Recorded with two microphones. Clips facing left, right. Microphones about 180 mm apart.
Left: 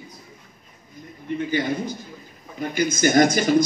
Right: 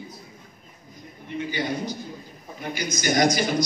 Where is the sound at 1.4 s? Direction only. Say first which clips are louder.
Left 3 dB; 50° left (ahead or behind).